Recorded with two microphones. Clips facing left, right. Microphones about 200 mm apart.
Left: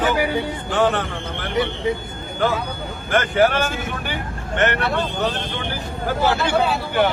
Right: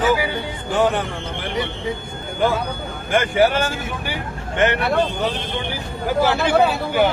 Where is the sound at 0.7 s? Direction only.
10° right (ahead or behind).